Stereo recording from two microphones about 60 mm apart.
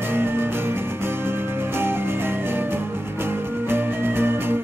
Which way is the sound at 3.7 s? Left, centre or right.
Right.